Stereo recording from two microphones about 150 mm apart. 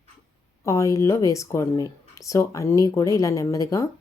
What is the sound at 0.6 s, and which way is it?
Speech, 20° left (ahead or behind).